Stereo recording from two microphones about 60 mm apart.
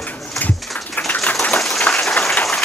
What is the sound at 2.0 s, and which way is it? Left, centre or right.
Rain on surface, centre.